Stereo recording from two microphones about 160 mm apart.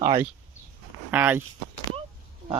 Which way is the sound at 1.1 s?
10° right (ahead or behind).